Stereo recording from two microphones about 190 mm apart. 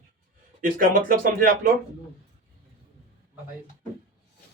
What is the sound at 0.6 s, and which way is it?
Speech, 45° right (ahead or behind).